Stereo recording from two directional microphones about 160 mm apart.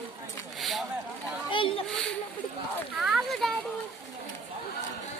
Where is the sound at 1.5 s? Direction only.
35° left (ahead or behind).